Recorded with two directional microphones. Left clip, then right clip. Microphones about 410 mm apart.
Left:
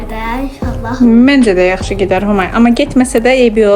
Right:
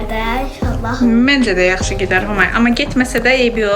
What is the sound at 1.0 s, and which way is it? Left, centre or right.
Speech, centre.